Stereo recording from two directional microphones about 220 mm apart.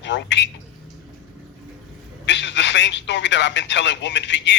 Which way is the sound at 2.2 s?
55° left (ahead or behind).